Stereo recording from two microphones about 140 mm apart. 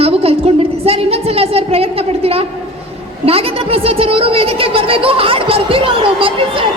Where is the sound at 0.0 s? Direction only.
45° right (ahead or behind).